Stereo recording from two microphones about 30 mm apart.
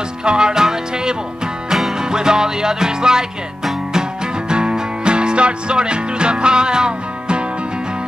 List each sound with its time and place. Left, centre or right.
0.2 s music: right
4.5 s music: right